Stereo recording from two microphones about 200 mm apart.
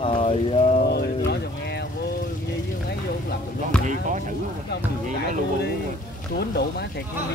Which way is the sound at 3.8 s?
40° right (ahead or behind).